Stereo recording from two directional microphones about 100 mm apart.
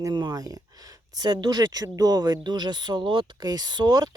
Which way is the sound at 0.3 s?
35° right (ahead or behind).